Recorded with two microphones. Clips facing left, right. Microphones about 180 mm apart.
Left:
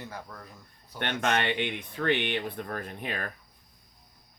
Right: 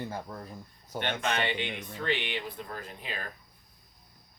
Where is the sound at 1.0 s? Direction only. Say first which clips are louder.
Left 3 dB; 60° left (ahead or behind).